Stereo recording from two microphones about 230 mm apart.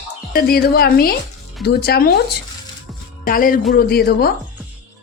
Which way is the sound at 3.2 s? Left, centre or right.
Left.